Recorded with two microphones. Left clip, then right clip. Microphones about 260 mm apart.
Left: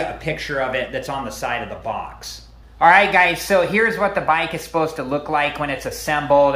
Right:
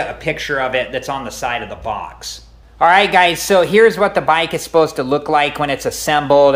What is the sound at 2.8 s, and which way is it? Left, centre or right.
A man's voice, right.